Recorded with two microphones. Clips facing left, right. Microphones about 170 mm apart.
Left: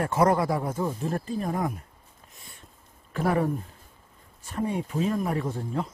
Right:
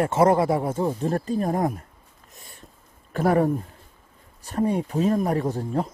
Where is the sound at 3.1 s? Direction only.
40° right (ahead or behind).